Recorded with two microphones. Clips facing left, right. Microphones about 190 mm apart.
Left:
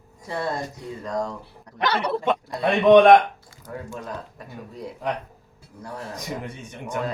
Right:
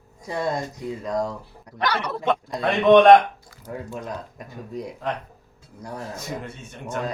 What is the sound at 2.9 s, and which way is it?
Speech, 10° left (ahead or behind).